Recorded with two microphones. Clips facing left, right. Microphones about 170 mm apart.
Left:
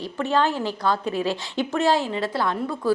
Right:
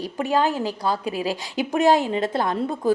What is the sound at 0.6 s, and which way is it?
Speech, 35° right (ahead or behind).